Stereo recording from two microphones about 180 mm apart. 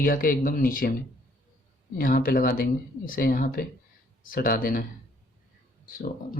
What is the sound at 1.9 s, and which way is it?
Speech, 50° left (ahead or behind).